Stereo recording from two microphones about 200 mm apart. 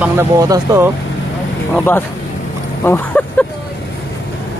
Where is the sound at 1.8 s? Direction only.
10° left (ahead or behind).